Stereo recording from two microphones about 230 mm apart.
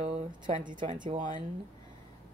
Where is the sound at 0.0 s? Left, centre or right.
Right.